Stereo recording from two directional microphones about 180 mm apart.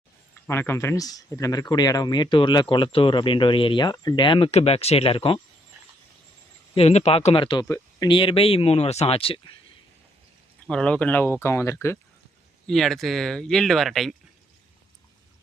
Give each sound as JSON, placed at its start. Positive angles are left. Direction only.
{"t": 0.4, "sound": "speech", "side_deg": 10}
{"t": 6.7, "sound": "speech", "side_deg": 35}
{"t": 10.7, "sound": "speech", "side_deg": 5}
{"t": 12.6, "sound": "speech", "side_deg": 0}